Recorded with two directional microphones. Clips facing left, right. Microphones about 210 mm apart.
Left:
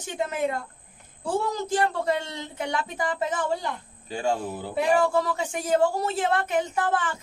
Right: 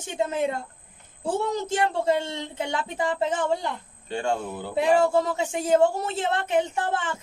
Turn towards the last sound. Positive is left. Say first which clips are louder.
# left 1 dB
turn(degrees=-25)  # may be behind; listen again after turning